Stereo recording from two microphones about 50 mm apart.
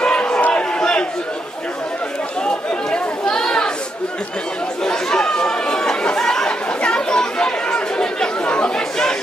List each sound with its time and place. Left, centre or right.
0.0 s a sound: centre
2.4 s chatter: centre
4.8 s chatter: centre